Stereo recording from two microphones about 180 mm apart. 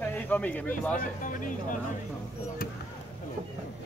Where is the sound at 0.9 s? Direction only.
45° left (ahead or behind).